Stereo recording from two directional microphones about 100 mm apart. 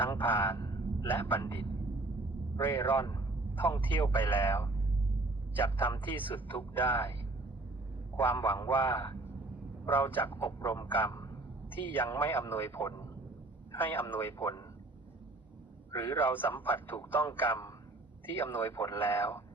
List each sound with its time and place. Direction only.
0.0 s a man's voice: 20° left (ahead or behind)
0.6 s a sound: 40° left (ahead or behind)
1.0 s speech: 20° left (ahead or behind)
2.6 s speech: 20° left (ahead or behind)
8.2 s speech: 20° left (ahead or behind)
16.0 s speech: 20° left (ahead or behind)